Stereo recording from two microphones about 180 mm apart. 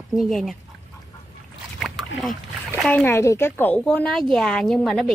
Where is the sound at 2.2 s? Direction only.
Centre (ahead or behind).